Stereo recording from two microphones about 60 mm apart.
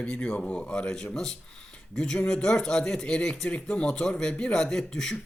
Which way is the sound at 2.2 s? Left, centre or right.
Centre.